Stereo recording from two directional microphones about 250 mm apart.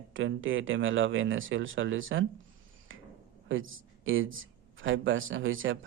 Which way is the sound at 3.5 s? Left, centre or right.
Right.